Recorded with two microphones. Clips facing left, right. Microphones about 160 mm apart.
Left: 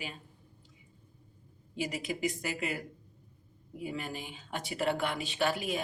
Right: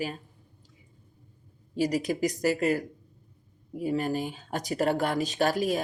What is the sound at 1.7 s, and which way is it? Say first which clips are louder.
Speech: right 9 dB; 40° right (ahead or behind).